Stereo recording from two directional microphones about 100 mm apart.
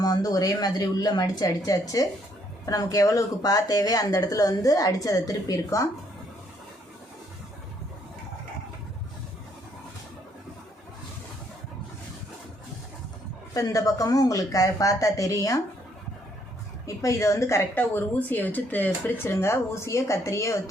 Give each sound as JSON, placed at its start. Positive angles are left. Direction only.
{"t": 0.0, "sound": "speech", "side_deg": 40}
{"t": 13.5, "sound": "speech", "side_deg": 35}
{"t": 16.8, "sound": "a woman's voice", "side_deg": 30}